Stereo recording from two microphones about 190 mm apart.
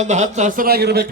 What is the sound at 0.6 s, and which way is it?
Speech, 55° right (ahead or behind).